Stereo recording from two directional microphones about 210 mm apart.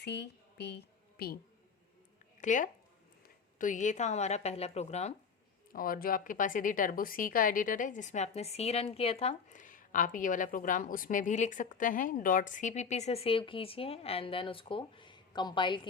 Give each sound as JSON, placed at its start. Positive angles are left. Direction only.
{"t": 0.0, "sound": "a woman's voice", "side_deg": 50}
{"t": 2.4, "sound": "speech", "side_deg": 35}
{"t": 5.7, "sound": "a woman's voice", "side_deg": 40}